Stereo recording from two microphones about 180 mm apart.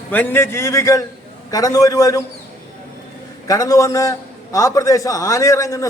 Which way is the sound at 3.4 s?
20° left (ahead or behind).